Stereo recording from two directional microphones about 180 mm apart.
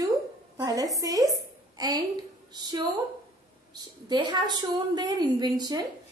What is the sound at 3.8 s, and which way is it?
A woman's voice, 25° right (ahead or behind).